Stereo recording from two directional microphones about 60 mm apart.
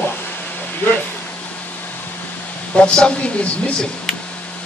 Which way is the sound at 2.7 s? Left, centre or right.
Centre.